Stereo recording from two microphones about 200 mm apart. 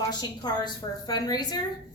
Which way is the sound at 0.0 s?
20° left (ahead or behind).